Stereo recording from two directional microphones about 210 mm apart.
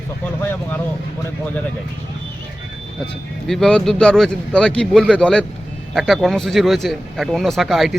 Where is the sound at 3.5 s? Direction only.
5° left (ahead or behind).